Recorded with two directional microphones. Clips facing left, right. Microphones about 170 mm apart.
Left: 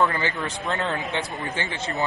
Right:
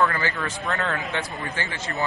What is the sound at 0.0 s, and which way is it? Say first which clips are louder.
Speech: even; 20° left (ahead or behind).